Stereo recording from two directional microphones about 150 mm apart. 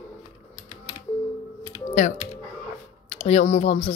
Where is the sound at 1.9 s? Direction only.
60° left (ahead or behind).